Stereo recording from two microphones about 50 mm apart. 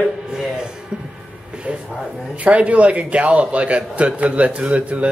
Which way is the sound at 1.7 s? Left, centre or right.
Centre.